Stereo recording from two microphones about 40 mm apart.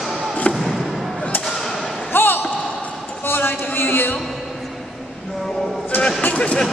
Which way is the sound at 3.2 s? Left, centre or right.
Left.